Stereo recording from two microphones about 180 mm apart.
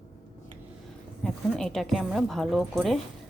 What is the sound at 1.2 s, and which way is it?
A woman's voice, 5° left (ahead or behind).